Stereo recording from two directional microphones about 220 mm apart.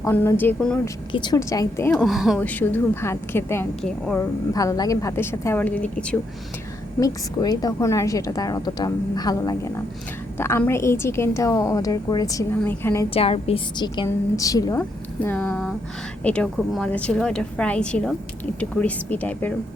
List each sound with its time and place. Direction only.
0.0 s a woman's voice: 10° left (ahead or behind)
1.1 s a woman's voice: 20° left (ahead or behind)
7.0 s a woman's voice: 15° left (ahead or behind)
13.1 s a woman's voice: 25° left (ahead or behind); by 19.5 s 5° left (ahead or behind)